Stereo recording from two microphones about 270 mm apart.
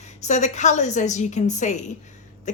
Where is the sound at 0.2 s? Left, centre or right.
Left.